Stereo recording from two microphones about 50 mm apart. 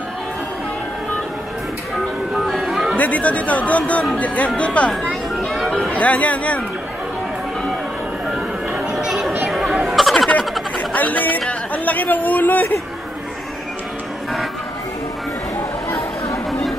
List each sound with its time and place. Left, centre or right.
2.4 s music: centre
3.0 s speech: left
8.9 s children playing: centre
9.5 s chatter: centre
9.8 s a sound: centre
10.8 s a sound: left
11.4 s speech: left